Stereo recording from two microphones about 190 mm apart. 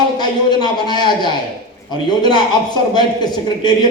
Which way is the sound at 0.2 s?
20° left (ahead or behind).